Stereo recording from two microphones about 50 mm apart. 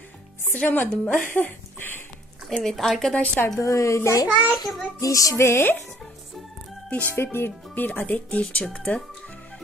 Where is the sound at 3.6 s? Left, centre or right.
Left.